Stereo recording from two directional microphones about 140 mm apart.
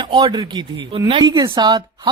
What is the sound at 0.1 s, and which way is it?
Speech, 30° right (ahead or behind).